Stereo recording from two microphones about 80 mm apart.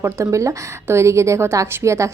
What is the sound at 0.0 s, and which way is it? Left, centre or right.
A woman's voice, right.